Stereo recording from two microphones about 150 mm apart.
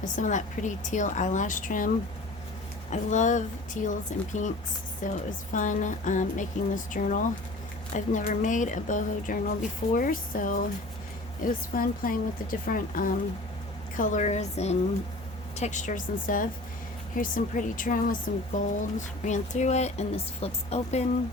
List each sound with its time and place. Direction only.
0.0 s a woman's voice: 55° left (ahead or behind)
2.9 s a woman's voice: 55° left (ahead or behind); by 13.1 s 70° left (ahead or behind)
13.9 s a woman's voice: 60° left (ahead or behind)